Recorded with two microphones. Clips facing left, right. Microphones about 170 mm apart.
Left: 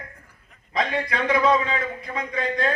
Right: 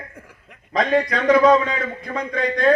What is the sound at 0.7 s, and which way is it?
A man's voice, 40° right (ahead or behind).